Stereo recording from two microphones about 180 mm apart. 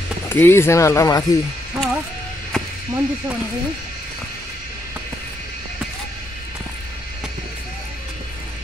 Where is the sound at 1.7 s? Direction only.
Centre (ahead or behind).